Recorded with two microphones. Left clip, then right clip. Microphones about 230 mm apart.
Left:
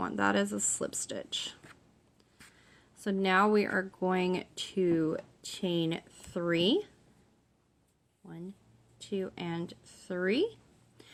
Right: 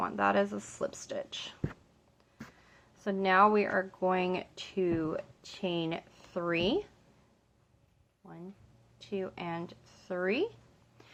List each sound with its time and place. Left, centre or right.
0.0 s speech: left
3.0 s speech: left
9.0 s speech: left